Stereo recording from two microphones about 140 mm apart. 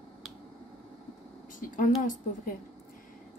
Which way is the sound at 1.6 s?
75° left (ahead or behind).